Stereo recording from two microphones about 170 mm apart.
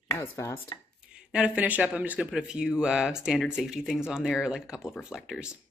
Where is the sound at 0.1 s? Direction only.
15° left (ahead or behind).